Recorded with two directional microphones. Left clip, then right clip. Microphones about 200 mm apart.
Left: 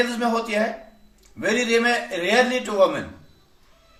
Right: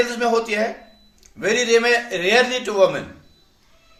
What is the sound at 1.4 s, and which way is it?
A man's voice, 45° right (ahead or behind).